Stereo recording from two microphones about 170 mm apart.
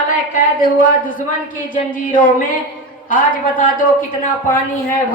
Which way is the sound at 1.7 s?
55° left (ahead or behind).